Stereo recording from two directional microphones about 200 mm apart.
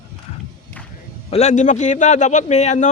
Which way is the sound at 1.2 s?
30° left (ahead or behind).